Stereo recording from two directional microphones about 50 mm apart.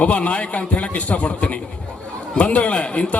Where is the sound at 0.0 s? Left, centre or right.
Left.